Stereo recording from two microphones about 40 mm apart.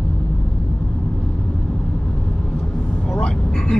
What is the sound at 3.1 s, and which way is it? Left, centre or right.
Vehicle, left.